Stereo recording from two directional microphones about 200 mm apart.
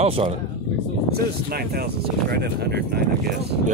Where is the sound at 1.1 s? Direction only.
50° right (ahead or behind).